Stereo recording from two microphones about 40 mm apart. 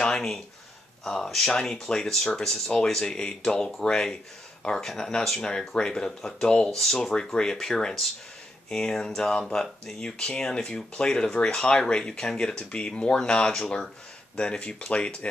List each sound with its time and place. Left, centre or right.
0.0 s speech: centre
14.9 s speech: left